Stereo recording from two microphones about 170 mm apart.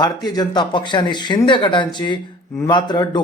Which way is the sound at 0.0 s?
25° left (ahead or behind).